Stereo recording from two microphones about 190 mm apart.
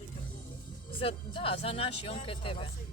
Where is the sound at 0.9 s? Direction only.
30° left (ahead or behind).